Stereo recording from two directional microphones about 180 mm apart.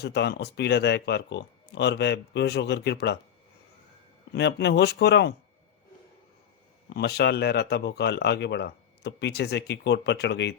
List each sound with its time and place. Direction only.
0.0 s speech: 65° left (ahead or behind)
4.3 s speech: 70° left (ahead or behind)
6.9 s speech: 65° left (ahead or behind)